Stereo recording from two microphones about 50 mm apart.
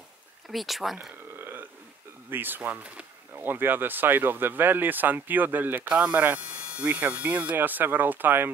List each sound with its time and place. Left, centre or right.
0.5 s speech: centre
1.4 s burping: right
2.3 s speech: right
5.9 s speech: right
7.5 s speech: right